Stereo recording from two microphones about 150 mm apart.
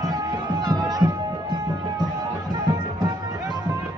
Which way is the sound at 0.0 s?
25° right (ahead or behind).